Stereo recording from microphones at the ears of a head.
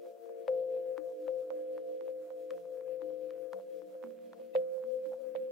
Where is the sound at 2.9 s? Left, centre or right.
Left.